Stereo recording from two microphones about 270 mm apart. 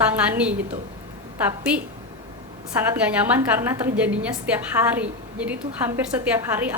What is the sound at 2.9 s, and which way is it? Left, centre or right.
A woman's voice, centre.